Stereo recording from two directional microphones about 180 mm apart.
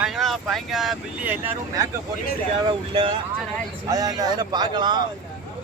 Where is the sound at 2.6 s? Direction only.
30° right (ahead or behind).